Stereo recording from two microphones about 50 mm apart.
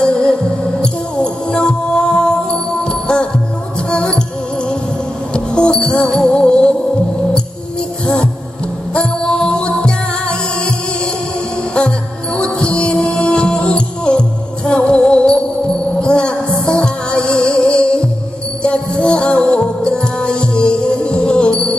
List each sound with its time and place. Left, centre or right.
0.0 s music: centre
5.3 s music: centre
8.9 s music: centre
12.4 s music: centre